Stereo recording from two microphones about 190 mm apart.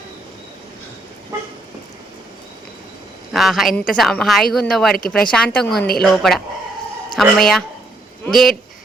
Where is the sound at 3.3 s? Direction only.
Centre (ahead or behind).